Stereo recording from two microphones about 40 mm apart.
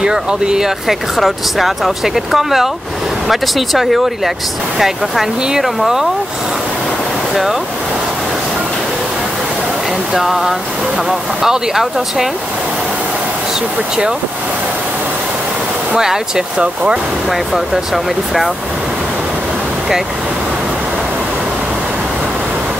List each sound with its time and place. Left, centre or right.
0.0 s speech: right
10.1 s speech: centre
16.0 s speech: centre
17.9 s speech: centre